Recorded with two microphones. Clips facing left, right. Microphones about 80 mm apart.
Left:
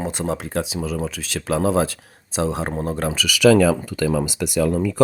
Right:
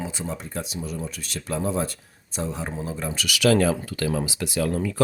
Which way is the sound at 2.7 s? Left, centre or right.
Left.